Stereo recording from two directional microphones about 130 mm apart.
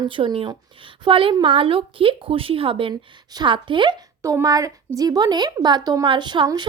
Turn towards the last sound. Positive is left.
turn(degrees=-35)  # may be behind; listen again after turning